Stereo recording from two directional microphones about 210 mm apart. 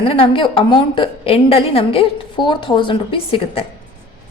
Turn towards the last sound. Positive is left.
turn(degrees=25)  # may be behind; listen again after turning